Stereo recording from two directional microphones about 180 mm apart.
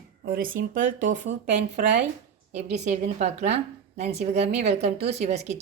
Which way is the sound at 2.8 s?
40° right (ahead or behind).